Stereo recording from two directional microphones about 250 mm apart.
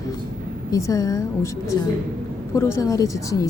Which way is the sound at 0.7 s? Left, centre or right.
Centre.